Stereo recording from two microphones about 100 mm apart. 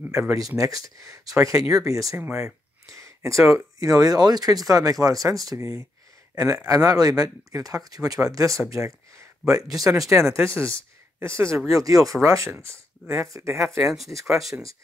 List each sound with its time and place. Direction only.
0.3 s speech: 35° right (ahead or behind)
13.6 s speech: centre (ahead or behind)